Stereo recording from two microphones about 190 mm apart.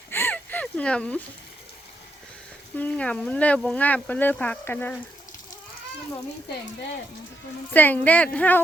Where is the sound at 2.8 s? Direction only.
5° left (ahead or behind).